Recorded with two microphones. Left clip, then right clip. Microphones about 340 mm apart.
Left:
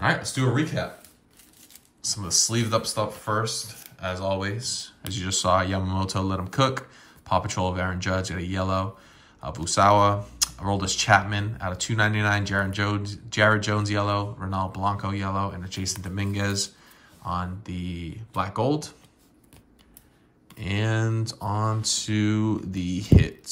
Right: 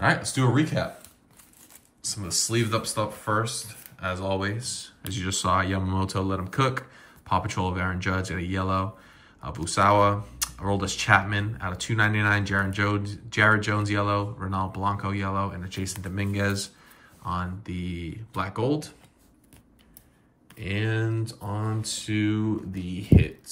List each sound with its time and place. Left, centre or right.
0.0 s speech: centre
2.0 s speech: centre
20.5 s speech: centre